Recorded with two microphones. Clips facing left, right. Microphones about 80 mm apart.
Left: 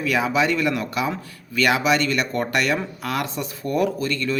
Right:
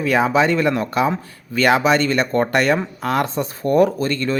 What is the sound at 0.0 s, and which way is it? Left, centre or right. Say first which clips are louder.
Speech: right 5 dB; right.